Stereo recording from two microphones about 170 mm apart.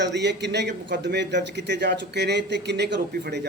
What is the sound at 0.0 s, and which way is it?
A man's voice, 90° right.